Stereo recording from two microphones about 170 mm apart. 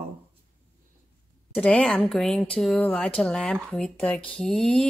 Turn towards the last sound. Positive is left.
turn(degrees=5)  # may be behind; listen again after turning